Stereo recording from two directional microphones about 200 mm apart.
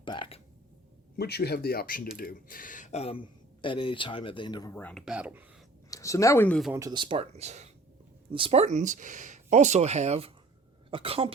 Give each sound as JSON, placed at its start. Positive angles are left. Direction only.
{"t": 0.0, "sound": "a sound", "side_deg": 25}
{"t": 1.1, "sound": "speech", "side_deg": 55}
{"t": 4.7, "sound": "speech", "side_deg": 5}
{"t": 5.0, "sound": "speech", "side_deg": -5}
{"t": 5.9, "sound": "speech", "side_deg": 15}
{"t": 6.7, "sound": "speech", "side_deg": -20}